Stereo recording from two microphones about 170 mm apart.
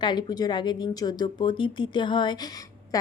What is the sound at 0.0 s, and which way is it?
Speech, 25° left (ahead or behind).